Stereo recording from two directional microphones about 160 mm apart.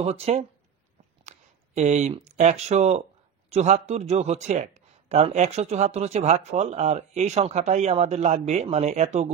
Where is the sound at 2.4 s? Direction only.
45° right (ahead or behind).